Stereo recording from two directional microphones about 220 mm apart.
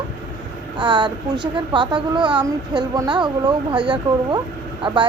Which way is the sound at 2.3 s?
5° right (ahead or behind).